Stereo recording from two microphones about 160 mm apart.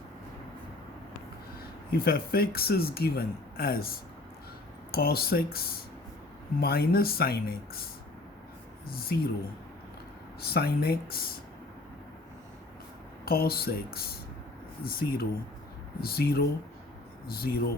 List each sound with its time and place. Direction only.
1.9 s speech: 70° left (ahead or behind)
8.9 s speech: 70° left (ahead or behind)
10.4 s speech: 70° left (ahead or behind)
13.2 s speech: 70° left (ahead or behind)